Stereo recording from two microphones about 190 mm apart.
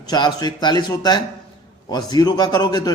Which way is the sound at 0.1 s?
20° left (ahead or behind).